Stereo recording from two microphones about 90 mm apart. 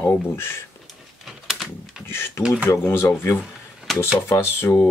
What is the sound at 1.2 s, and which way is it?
Typewriter, 5° right (ahead or behind).